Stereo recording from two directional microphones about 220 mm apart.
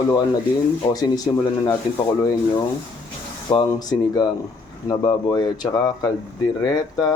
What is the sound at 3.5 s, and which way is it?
Speech, 20° left (ahead or behind).